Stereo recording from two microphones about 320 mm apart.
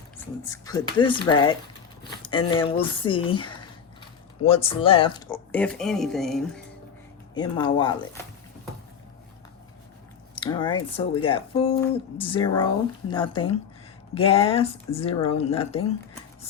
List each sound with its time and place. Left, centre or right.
0.4 s speech: centre
5.3 s speech: centre
7.3 s speech: centre
10.3 s speech: centre